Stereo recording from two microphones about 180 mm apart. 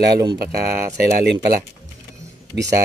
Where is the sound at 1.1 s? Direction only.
70° right (ahead or behind).